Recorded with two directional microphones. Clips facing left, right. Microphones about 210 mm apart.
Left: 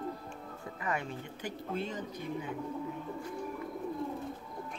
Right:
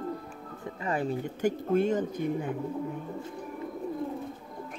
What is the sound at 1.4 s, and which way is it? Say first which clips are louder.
Speech: right 12 dB; 50° right (ahead or behind).